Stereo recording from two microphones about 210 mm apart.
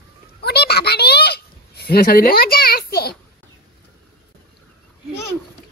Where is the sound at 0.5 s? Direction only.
50° left (ahead or behind).